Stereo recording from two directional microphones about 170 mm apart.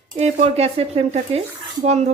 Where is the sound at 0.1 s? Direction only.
40° right (ahead or behind).